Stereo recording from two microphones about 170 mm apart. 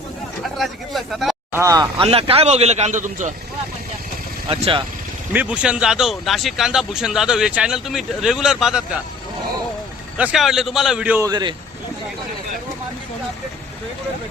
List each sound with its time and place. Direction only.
0.5 s speech: centre (ahead or behind)
1.5 s speech: 20° right (ahead or behind)
2.0 s a man's voice: 35° right (ahead or behind)
4.4 s a man's voice: 35° right (ahead or behind)
5.3 s speech: 10° right (ahead or behind)
10.3 s speech: centre (ahead or behind)
11.3 s speech: 25° right (ahead or behind)